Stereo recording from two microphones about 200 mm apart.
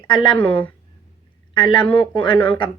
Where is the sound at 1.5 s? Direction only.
20° left (ahead or behind).